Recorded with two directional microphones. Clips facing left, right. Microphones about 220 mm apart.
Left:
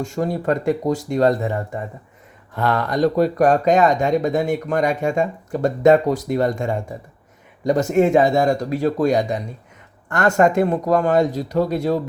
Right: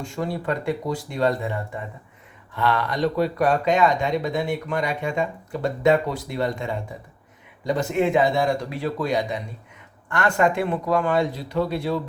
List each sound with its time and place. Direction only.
0.0 s speech: 45° left (ahead or behind)